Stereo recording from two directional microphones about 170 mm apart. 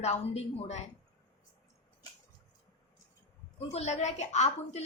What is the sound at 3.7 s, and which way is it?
A woman's voice, 40° left (ahead or behind).